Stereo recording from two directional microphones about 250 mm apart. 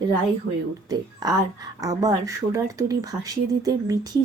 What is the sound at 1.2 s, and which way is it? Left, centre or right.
Speech, centre.